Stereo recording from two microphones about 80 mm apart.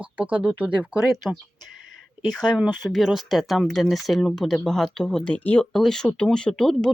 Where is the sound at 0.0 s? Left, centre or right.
Centre.